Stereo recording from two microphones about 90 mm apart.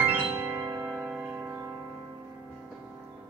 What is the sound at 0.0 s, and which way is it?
Music, 20° right (ahead or behind).